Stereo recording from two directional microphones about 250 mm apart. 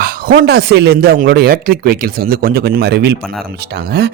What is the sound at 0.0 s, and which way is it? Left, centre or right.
Speech, right.